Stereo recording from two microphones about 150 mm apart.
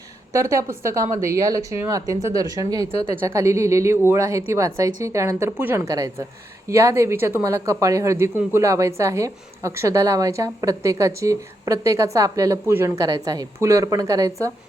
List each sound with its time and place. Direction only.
0.3 s speech: 20° right (ahead or behind)